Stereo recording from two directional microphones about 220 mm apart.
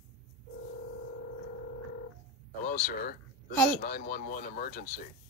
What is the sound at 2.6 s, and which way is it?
Speech, 40° left (ahead or behind).